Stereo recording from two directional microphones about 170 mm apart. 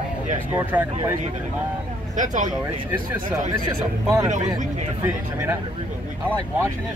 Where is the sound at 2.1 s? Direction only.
45° right (ahead or behind).